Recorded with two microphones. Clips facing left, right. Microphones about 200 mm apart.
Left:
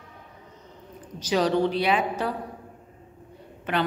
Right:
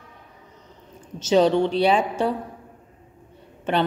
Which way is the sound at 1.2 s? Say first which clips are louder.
Right 5 dB; 25° right (ahead or behind).